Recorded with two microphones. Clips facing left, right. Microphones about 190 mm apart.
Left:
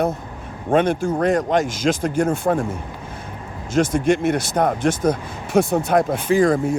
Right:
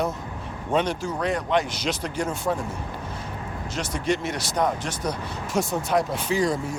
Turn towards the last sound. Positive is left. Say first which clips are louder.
# left 8 dB
turn(degrees=55)  # may be behind; listen again after turning